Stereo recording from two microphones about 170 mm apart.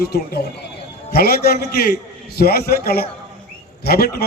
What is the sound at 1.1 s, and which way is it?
A man's voice, 65° left (ahead or behind).